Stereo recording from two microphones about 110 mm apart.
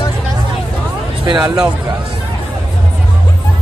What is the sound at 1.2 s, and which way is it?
Speech, 40° right (ahead or behind).